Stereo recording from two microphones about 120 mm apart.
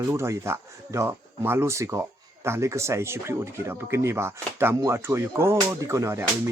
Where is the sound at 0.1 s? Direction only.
20° right (ahead or behind).